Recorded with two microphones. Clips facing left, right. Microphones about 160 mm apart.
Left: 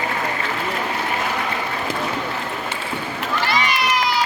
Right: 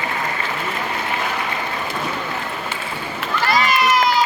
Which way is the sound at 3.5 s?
45° right (ahead or behind).